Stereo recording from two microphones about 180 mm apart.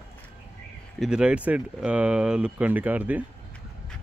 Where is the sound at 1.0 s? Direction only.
5° right (ahead or behind).